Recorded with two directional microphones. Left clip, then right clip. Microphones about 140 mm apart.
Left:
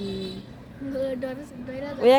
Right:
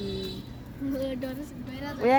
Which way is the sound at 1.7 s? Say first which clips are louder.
Left 6 dB; 25° left (ahead or behind).